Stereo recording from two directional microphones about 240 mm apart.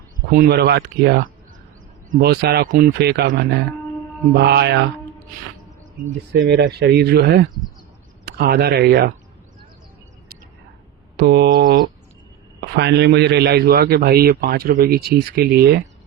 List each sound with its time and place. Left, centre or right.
0.3 s a man's voice: right
6.3 s speech: right
11.2 s a man's voice: right